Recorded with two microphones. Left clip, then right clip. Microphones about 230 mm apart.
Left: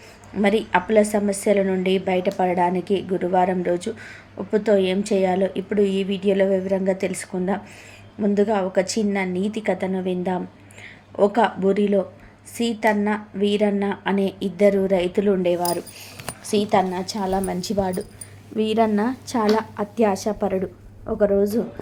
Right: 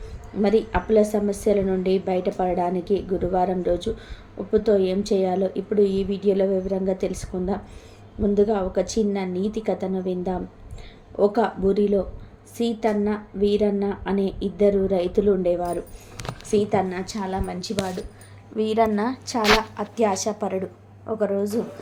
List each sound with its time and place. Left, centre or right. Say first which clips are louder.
0.4 s a woman's voice: left 2 dB; centre
18.5 s a woman's voice: left 1 dB; centre